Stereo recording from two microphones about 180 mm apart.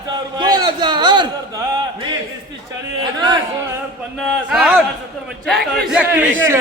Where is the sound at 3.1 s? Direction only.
25° right (ahead or behind).